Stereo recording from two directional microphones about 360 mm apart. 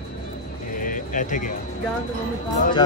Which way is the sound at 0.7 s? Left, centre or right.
Left.